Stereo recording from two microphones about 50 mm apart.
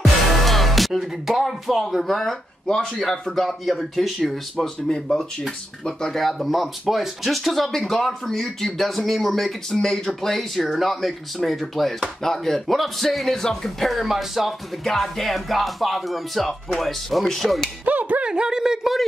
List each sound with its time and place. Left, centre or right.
0.4 s speech: centre
4.6 s speech: centre
13.8 s speech: centre
14.9 s speech: centre
17.8 s speech: right
18.2 s speech: centre